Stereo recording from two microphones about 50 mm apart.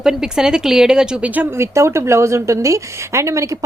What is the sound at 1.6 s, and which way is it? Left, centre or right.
A woman's voice, right.